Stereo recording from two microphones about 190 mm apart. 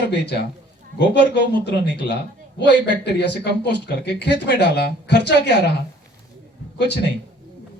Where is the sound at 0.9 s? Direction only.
65° left (ahead or behind).